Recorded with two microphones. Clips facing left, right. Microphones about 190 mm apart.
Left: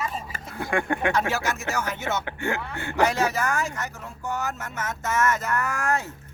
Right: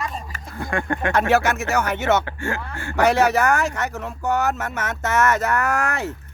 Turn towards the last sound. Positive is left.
turn(degrees=-75)  # may be behind; listen again after turning